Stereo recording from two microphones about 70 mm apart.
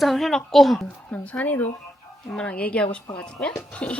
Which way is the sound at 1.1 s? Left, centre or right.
Left.